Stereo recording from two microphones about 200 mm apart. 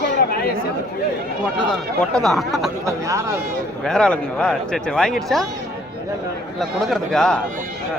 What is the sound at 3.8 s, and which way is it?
Speech, 5° left (ahead or behind).